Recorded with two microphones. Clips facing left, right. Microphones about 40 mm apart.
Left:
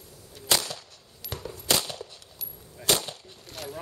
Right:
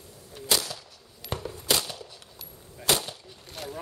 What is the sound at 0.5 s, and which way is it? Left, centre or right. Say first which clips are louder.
Whip: left 1 dB; centre.